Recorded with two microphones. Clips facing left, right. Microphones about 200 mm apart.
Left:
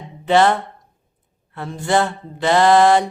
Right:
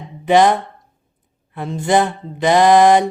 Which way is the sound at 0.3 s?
15° right (ahead or behind).